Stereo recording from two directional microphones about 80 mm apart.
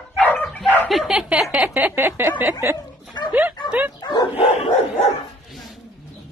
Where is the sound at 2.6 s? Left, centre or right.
Right.